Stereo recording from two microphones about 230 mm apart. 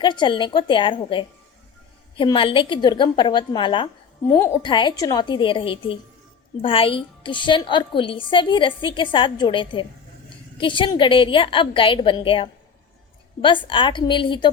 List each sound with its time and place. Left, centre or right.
0.0 s a woman's voice: centre
4.3 s a woman's voice: centre